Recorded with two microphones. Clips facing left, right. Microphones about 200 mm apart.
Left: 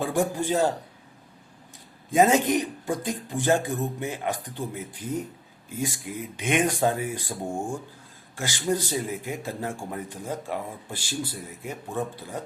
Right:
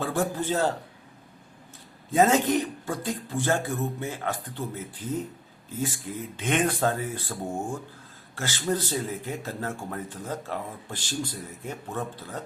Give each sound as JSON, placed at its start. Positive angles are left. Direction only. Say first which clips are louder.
{"t": 0.0, "sound": "a man's voice", "louder": "left 2 dB", "side_deg": 15}
{"t": 2.1, "sound": "speech", "louder": "left 1 dB", "side_deg": 15}